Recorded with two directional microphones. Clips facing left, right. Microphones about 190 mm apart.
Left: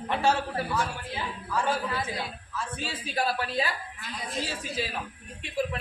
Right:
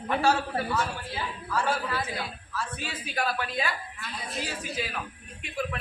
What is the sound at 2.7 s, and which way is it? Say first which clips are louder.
A woman's voice: left 4 dB; 30° left (ahead or behind).